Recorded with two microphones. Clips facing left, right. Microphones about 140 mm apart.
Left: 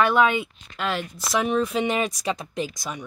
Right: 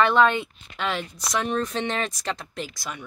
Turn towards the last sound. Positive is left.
turn(degrees=15)  # may be behind; listen again after turning